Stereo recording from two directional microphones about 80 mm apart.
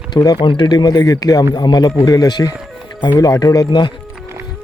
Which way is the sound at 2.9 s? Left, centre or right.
Left.